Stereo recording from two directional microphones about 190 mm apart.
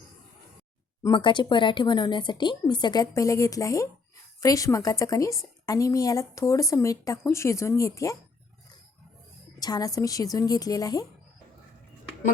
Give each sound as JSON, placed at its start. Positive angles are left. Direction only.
{"t": 1.0, "sound": "a woman's voice", "side_deg": 25}
{"t": 9.6, "sound": "speech", "side_deg": 20}